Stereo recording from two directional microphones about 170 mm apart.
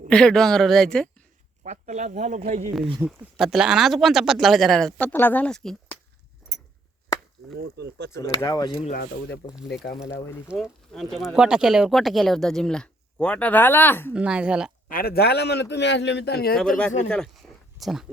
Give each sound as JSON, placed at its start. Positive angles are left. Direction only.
{"t": 0.1, "sound": "speech", "side_deg": 5}
{"t": 1.6, "sound": "speech", "side_deg": -45}
{"t": 3.1, "sound": "speech", "side_deg": 0}
{"t": 7.6, "sound": "speech", "side_deg": -80}
{"t": 8.4, "sound": "speech", "side_deg": 20}
{"t": 9.6, "sound": "speech", "side_deg": 90}
{"t": 10.5, "sound": "speech", "side_deg": 0}
{"t": 14.1, "sound": "speech", "side_deg": -5}
{"t": 14.8, "sound": "speech", "side_deg": 60}
{"t": 15.7, "sound": "speech", "side_deg": 90}
{"t": 16.6, "sound": "speech", "side_deg": 5}